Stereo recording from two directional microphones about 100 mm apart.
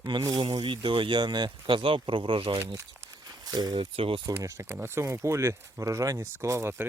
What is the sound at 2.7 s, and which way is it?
Crumpling, 35° right (ahead or behind).